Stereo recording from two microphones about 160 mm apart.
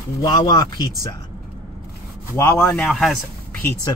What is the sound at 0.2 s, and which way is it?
Speech, 25° left (ahead or behind).